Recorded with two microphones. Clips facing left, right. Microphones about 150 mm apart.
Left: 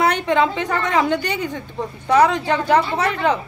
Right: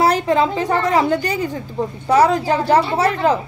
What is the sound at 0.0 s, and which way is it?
A woman's voice, 35° right (ahead or behind).